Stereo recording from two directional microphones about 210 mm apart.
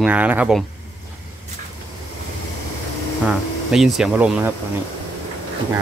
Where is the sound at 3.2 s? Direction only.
Centre (ahead or behind).